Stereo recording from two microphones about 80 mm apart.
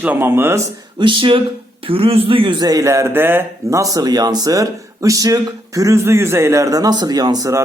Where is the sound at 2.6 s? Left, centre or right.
Right.